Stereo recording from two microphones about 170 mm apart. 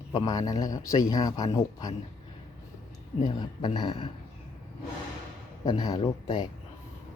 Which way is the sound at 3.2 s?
25° left (ahead or behind).